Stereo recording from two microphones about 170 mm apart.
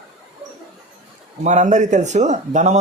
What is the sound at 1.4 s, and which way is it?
Speech, 45° right (ahead or behind).